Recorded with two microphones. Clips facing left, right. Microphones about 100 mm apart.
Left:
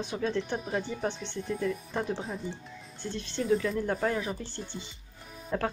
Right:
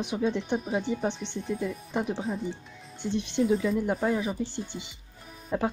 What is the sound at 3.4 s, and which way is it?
Speech, 5° right (ahead or behind).